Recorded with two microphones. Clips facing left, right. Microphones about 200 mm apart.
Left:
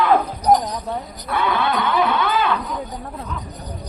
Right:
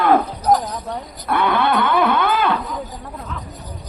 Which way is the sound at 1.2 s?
55° right (ahead or behind).